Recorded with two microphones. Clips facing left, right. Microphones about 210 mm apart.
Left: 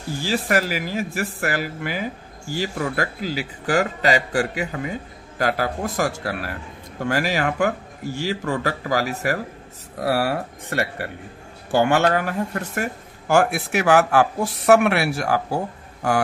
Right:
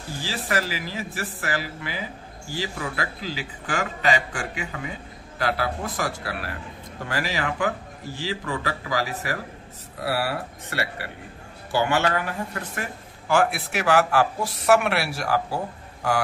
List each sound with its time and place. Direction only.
0.2 s a man's voice: 45° left (ahead or behind)